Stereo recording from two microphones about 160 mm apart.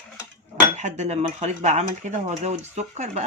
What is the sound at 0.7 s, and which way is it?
Speech, 45° right (ahead or behind).